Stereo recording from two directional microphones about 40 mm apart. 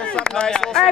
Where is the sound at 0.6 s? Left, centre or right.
Centre.